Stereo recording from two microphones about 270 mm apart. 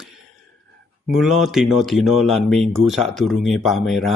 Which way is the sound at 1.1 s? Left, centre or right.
Centre.